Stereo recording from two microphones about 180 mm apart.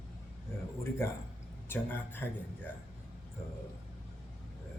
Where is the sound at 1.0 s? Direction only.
15° left (ahead or behind).